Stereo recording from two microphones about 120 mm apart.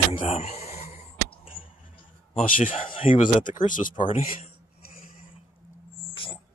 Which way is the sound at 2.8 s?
50° left (ahead or behind).